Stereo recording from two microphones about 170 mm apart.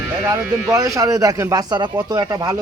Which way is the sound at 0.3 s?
20° right (ahead or behind).